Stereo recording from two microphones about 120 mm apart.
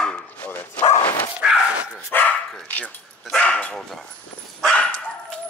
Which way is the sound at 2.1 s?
15° left (ahead or behind).